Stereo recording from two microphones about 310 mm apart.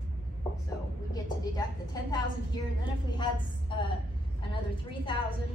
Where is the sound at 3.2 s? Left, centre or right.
Centre.